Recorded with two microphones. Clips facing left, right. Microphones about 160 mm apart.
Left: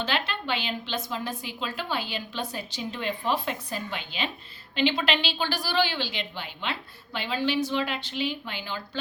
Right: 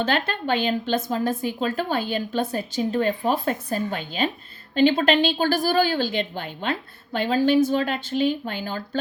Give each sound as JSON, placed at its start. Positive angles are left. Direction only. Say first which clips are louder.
{"t": 0.0, "sound": "a woman's voice", "louder": "right 6 dB", "side_deg": -50}